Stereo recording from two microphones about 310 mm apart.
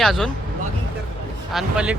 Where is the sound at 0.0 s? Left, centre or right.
Centre.